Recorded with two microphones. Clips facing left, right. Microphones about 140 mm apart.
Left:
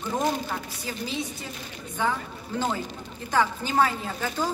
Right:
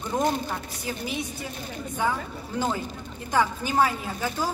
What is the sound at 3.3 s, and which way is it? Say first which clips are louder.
Speech: even; 15° right (ahead or behind).